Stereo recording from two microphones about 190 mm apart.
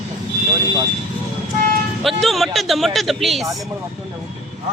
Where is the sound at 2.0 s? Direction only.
Centre (ahead or behind).